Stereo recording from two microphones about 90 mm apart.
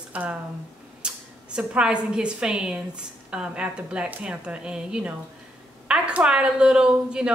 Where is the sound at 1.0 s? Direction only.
10° right (ahead or behind).